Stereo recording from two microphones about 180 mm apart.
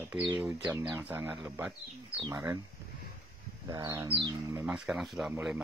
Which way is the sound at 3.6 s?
20° right (ahead or behind).